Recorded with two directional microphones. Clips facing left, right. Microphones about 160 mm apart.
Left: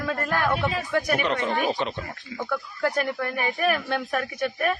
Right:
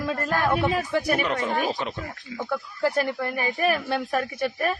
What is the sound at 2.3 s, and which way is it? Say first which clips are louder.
Speech: right 1 dB; 20° right (ahead or behind).